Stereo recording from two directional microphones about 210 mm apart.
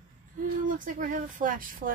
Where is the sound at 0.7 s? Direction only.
40° right (ahead or behind).